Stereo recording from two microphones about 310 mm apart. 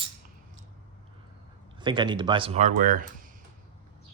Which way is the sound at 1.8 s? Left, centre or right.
Centre.